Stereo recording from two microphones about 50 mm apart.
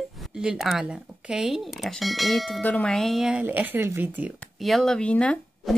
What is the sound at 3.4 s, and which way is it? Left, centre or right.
Speech, right.